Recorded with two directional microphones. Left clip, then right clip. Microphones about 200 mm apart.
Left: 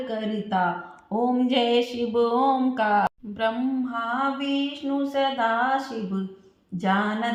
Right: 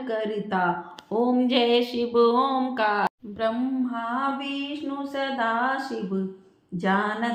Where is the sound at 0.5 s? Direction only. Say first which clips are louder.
Left 2 dB; 25° right (ahead or behind).